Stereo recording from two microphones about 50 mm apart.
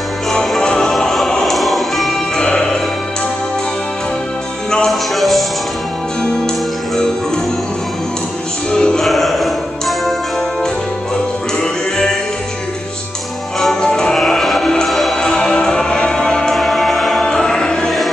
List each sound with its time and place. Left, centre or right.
0.3 s music: centre
2.3 s music: centre
4.6 s music: centre
5.1 s music: centre
8.6 s music: centre
9.0 s music: centre
13.6 s music: centre
15.1 s music: centre